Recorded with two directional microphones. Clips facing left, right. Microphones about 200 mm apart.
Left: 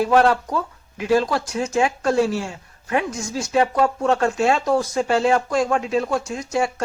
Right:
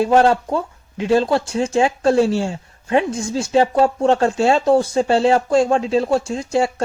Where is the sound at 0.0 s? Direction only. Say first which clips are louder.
Right 3 dB; 25° right (ahead or behind).